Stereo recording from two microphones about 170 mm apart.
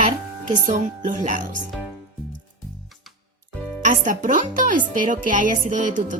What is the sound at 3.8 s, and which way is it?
Speech, 50° right (ahead or behind).